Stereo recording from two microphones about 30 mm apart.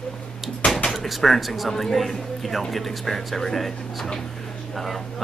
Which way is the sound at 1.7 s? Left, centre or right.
Centre.